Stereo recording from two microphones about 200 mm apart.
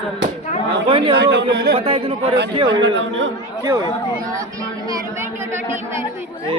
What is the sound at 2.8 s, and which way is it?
Speech, 65° right (ahead or behind).